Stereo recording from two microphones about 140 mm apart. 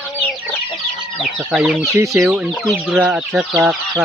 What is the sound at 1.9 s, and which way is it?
Speech, 20° right (ahead or behind).